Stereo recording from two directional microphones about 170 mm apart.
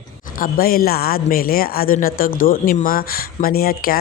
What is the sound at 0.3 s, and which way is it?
Speech, 55° left (ahead or behind).